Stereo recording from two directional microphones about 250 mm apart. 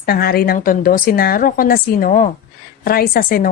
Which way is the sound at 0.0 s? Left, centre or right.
Left.